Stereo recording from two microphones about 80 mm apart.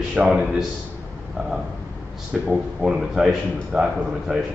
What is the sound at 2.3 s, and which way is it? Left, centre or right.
A man's voice, centre.